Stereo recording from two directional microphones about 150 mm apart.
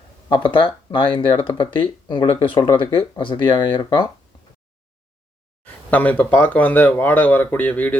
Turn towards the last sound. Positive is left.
turn(degrees=10)  # may be behind; listen again after turning